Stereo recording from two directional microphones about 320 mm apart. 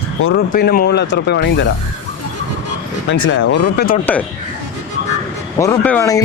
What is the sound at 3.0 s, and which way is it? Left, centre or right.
Speech, left.